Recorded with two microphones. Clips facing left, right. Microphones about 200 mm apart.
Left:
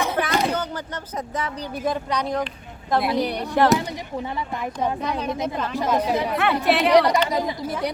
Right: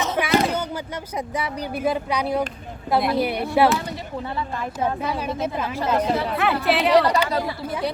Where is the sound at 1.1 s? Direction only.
10° right (ahead or behind).